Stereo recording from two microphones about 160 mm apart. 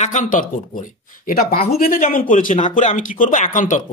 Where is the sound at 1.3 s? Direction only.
65° left (ahead or behind).